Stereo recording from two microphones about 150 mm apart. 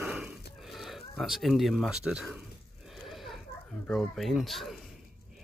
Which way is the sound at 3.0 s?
Centre (ahead or behind).